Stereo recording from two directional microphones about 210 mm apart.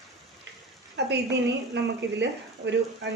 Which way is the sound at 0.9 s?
55° right (ahead or behind).